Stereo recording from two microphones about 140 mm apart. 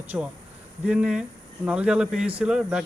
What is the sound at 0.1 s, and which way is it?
A man's voice, 10° right (ahead or behind).